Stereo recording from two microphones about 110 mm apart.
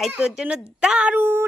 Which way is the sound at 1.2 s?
20° right (ahead or behind).